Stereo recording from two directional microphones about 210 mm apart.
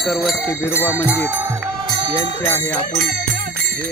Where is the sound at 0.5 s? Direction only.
10° left (ahead or behind).